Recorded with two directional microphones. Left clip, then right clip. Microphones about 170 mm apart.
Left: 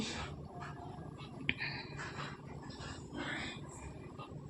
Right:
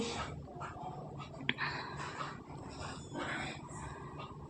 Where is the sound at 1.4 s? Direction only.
25° left (ahead or behind).